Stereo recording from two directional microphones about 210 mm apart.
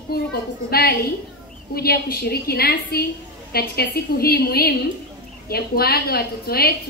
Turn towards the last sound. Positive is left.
turn(degrees=45)  # may be behind; listen again after turning